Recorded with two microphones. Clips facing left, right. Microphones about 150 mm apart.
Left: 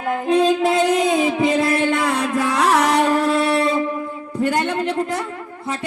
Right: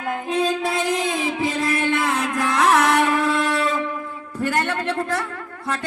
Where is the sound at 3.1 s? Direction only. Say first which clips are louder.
Left 3 dB; 40° left (ahead or behind).